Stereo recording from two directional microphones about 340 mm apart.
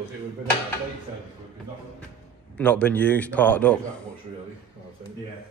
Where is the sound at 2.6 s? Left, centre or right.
Centre.